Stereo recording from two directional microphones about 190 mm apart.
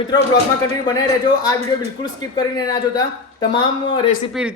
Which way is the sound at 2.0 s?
20° left (ahead or behind).